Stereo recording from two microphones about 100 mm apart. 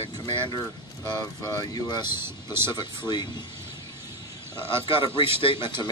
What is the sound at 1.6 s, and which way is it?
Speech, 45° left (ahead or behind).